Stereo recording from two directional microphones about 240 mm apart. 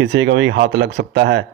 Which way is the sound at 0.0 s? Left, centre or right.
Right.